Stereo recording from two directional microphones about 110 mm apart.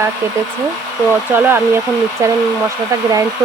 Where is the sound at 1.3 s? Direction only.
20° right (ahead or behind).